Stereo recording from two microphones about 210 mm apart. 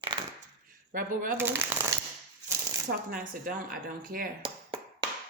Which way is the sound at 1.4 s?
10° right (ahead or behind).